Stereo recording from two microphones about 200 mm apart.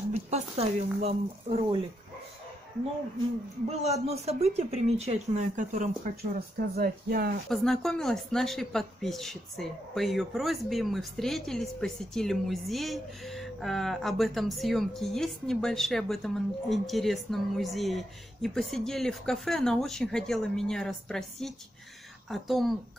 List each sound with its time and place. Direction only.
0.1 s speech: 30° right (ahead or behind)
3.8 s speech: 30° right (ahead or behind)
6.8 s speech: 50° right (ahead or behind)
7.4 s speech: centre (ahead or behind)